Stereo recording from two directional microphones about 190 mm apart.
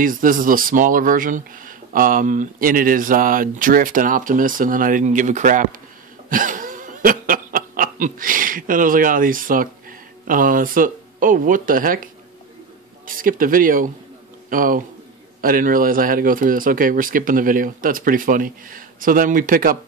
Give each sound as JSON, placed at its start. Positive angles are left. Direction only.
{"t": 0.0, "sound": "speech", "side_deg": -45}
{"t": 6.2, "sound": "snicker", "side_deg": -45}
{"t": 13.0, "sound": "speech", "side_deg": -45}